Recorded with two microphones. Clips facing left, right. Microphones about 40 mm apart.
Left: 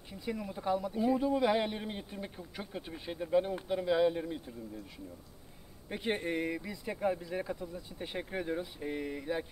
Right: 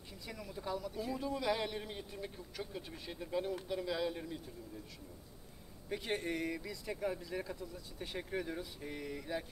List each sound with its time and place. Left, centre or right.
0.1 s speech: left
5.9 s speech: left